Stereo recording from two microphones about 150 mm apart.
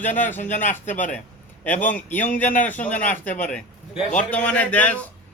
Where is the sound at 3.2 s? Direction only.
60° left (ahead or behind).